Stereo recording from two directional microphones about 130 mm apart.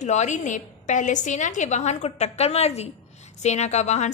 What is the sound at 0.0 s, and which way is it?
A woman's voice, 65° left (ahead or behind).